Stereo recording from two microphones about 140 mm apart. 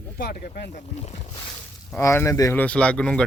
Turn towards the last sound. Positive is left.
turn(degrees=5)  # may be behind; listen again after turning